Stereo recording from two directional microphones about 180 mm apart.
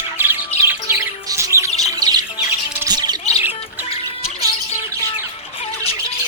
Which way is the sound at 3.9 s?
35° left (ahead or behind).